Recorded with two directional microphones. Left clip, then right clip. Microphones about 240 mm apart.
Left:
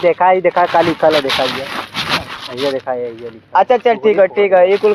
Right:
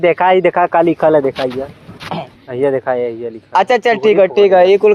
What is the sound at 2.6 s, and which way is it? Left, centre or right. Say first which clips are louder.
Speech: right 4 dB; right.